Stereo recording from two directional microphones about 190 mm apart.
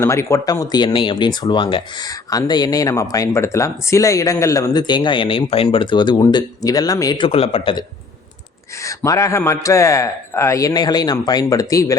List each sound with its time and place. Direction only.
0.0 s speech: 15° left (ahead or behind)
8.8 s a man's voice: 15° left (ahead or behind)